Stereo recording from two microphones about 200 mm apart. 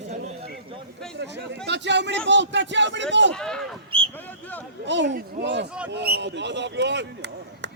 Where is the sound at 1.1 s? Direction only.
60° right (ahead or behind).